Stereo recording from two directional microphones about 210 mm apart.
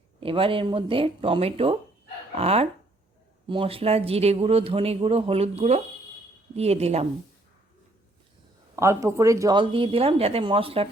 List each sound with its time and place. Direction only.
0.2 s a man's voice: 25° right (ahead or behind)
8.7 s a man's voice: 15° right (ahead or behind)